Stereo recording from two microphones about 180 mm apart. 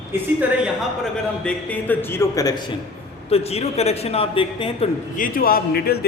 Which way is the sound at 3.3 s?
35° left (ahead or behind).